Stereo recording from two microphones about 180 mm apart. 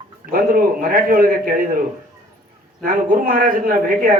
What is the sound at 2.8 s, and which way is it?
Speech, 50° right (ahead or behind).